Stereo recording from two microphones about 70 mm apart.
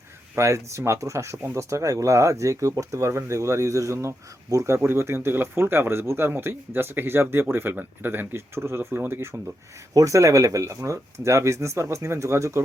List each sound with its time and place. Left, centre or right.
0.3 s speech: right
9.9 s speech: right